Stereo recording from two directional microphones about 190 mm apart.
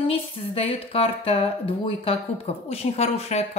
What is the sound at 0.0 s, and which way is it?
Speech, 30° left (ahead or behind).